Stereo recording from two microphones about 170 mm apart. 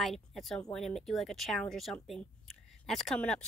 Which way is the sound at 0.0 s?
Centre (ahead or behind).